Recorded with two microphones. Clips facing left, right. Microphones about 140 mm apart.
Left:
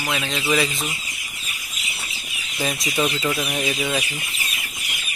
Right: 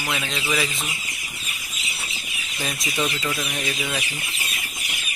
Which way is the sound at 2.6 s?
Centre (ahead or behind).